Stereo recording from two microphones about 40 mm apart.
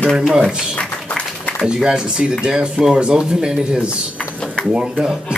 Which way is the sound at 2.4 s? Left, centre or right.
Right.